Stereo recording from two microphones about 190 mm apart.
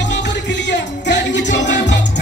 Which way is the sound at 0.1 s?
65° left (ahead or behind).